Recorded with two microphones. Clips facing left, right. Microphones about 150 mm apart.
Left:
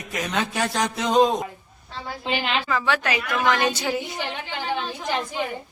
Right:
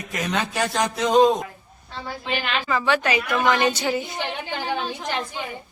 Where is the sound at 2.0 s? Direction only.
25° left (ahead or behind).